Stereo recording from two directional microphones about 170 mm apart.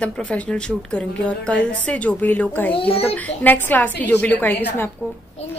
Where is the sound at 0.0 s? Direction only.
5° left (ahead or behind).